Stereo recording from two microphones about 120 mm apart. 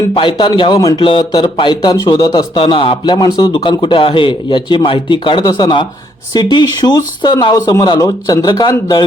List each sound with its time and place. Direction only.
0.2 s speech: 45° left (ahead or behind)
0.9 s speech: 45° left (ahead or behind)
2.6 s speech: 50° left (ahead or behind)
3.2 s speech: 35° left (ahead or behind)
3.4 s speech: 45° left (ahead or behind)